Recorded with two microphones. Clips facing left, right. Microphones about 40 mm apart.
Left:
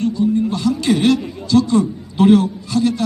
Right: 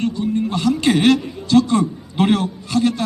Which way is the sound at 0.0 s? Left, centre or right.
Right.